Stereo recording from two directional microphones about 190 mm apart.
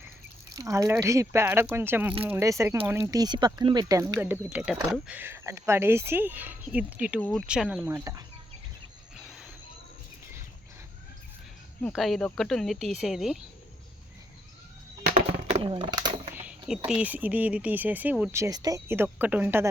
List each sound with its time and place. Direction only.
0.5 s speech: 20° right (ahead or behind)
7.2 s speech: 5° left (ahead or behind); by 8.2 s 15° right (ahead or behind)
9.1 s train: centre (ahead or behind)
11.8 s speech: 5° left (ahead or behind)
15.1 s a sound: 30° right (ahead or behind)
16.3 s speech: 5° right (ahead or behind)